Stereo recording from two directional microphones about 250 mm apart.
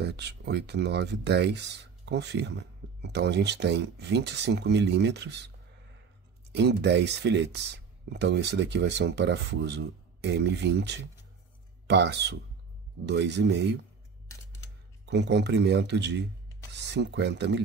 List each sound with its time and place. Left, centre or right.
0.0 s speech: right
6.5 s speech: right
15.0 s speech: right